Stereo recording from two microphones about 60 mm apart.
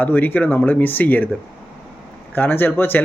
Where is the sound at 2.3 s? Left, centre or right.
Left.